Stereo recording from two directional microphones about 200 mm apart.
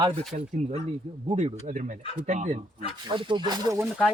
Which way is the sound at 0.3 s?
35° right (ahead or behind).